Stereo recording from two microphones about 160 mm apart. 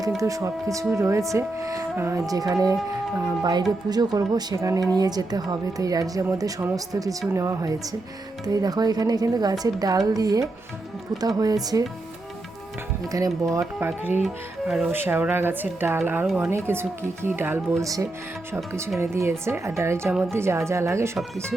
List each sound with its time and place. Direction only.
0.2 s speech: 20° right (ahead or behind)
13.1 s speech: 20° right (ahead or behind)
16.2 s speech: centre (ahead or behind)
16.5 s speech: 15° right (ahead or behind)